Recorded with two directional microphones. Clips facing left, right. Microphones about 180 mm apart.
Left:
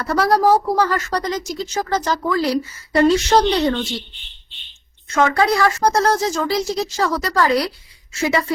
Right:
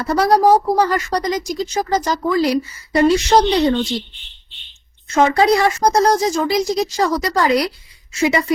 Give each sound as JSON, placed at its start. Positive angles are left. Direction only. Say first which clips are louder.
{"t": 0.0, "sound": "a woman's voice", "louder": "right 2 dB", "side_deg": -20}
{"t": 5.1, "sound": "a woman's voice", "louder": "right 3 dB", "side_deg": -20}